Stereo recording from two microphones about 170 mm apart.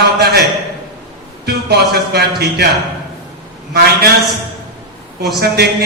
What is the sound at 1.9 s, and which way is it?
Speech, 70° right (ahead or behind).